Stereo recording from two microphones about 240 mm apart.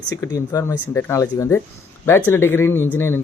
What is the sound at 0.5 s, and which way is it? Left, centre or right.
Speech, centre.